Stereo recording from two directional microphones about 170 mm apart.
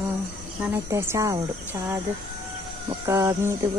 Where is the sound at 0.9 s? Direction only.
15° right (ahead or behind).